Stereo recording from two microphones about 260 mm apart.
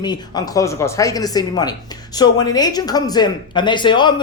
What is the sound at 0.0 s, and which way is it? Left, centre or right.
Speech, centre.